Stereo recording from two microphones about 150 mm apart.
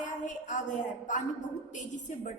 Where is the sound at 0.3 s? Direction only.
55° left (ahead or behind).